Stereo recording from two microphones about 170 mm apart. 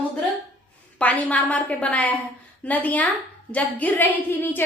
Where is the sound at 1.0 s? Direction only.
10° left (ahead or behind).